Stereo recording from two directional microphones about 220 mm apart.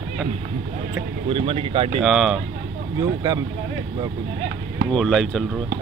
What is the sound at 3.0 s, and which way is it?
Speech, 15° right (ahead or behind).